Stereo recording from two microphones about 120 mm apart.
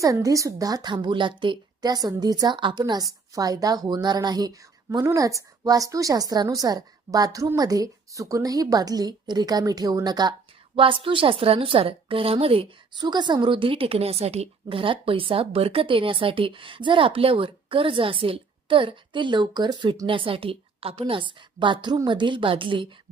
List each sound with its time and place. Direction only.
0.0 s a woman's voice: 30° right (ahead or behind)
10.8 s a woman's voice: 45° right (ahead or behind)